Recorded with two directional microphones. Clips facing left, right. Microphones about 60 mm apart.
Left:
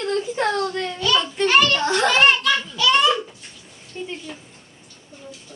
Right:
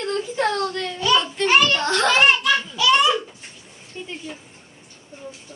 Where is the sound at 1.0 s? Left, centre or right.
Centre.